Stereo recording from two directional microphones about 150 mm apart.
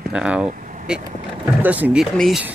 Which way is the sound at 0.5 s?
60° right (ahead or behind).